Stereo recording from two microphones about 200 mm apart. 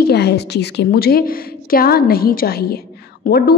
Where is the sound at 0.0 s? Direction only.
55° left (ahead or behind).